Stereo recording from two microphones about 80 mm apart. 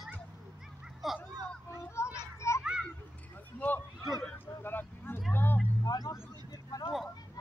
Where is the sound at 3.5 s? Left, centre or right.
Left.